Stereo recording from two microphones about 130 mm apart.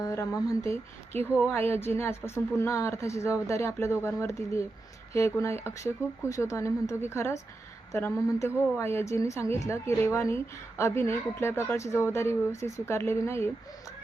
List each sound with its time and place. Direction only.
0.0 s a woman's voice: 20° left (ahead or behind)